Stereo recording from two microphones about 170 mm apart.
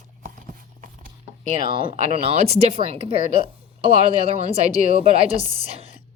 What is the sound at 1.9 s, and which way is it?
A woman's voice, 35° right (ahead or behind).